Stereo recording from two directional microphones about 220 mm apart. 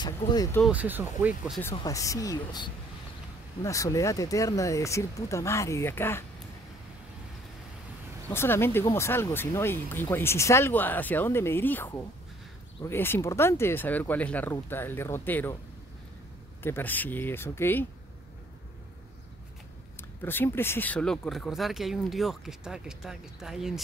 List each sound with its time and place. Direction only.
0.0 s speech: 20° left (ahead or behind)
0.7 s speech: 10° right (ahead or behind)
1.6 s speech: 15° left (ahead or behind)
8.3 s speech: 10° left (ahead or behind)
16.6 s speech: 10° left (ahead or behind)
20.0 s speech: 10° left (ahead or behind)